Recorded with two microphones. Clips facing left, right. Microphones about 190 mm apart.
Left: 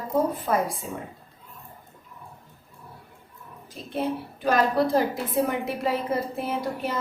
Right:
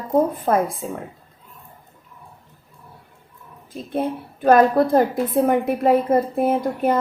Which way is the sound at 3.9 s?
50° right (ahead or behind).